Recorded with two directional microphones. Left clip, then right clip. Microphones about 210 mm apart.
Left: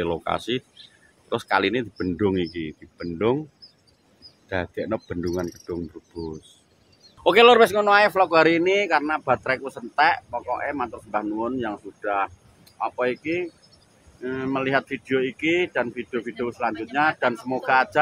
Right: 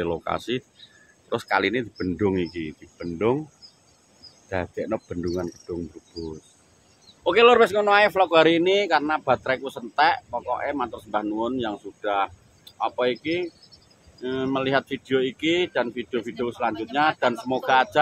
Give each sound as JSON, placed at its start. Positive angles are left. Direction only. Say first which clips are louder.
{"t": 0.0, "sound": "a man's voice", "louder": "left 1 dB", "side_deg": 10}
{"t": 4.5, "sound": "speech", "louder": "left 1 dB", "side_deg": 0}
{"t": 7.2, "sound": "a man's voice", "louder": "left 2 dB", "side_deg": 50}
{"t": 7.5, "sound": "a man's voice", "louder": "left 1 dB", "side_deg": 25}